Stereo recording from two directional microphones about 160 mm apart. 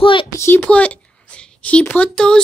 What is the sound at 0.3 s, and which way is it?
Speech, 15° left (ahead or behind).